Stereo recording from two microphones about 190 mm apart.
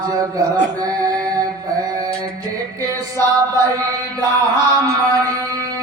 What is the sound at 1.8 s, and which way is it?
Mantra, 20° right (ahead or behind).